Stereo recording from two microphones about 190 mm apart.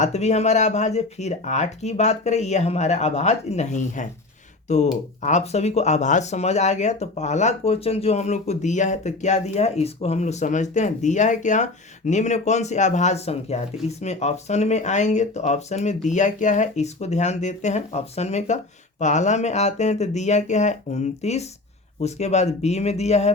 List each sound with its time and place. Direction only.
0.0 s speech: 35° left (ahead or behind)